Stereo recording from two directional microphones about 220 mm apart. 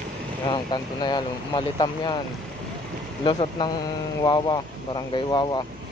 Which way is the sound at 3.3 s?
20° left (ahead or behind).